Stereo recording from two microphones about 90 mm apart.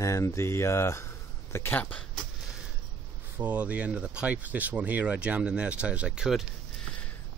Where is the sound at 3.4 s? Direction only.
15° right (ahead or behind).